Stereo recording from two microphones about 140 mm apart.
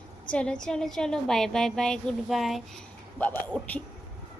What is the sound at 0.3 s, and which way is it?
A woman's voice, 5° left (ahead or behind).